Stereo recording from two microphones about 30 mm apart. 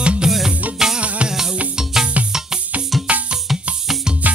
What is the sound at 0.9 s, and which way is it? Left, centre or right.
Music, right.